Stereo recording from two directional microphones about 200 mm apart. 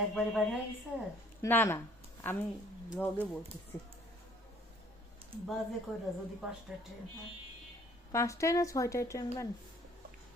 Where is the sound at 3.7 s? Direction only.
10° left (ahead or behind).